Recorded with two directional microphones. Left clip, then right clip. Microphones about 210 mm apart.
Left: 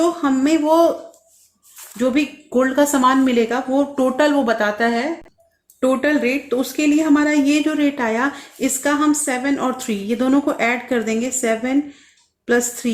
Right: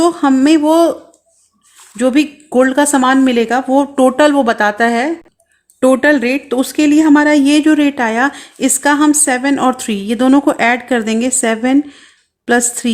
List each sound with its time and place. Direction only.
0.0 s speech: 50° right (ahead or behind)
2.0 s speech: 45° right (ahead or behind)